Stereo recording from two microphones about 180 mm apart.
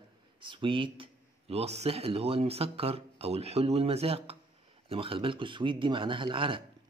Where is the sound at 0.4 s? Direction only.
30° right (ahead or behind).